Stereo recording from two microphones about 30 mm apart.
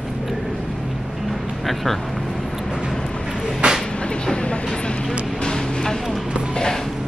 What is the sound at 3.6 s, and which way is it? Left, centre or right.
Vehicle, right.